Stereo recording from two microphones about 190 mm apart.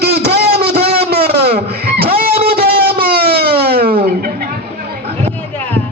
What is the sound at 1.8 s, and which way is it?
Guitar, 55° right (ahead or behind).